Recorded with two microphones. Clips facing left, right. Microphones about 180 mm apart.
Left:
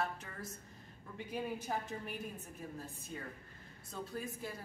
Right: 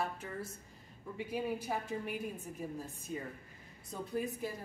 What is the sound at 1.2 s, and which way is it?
Speech, 10° right (ahead or behind).